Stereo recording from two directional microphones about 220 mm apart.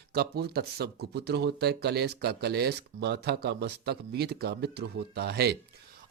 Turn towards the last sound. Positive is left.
turn(degrees=-45)  # may be behind; listen again after turning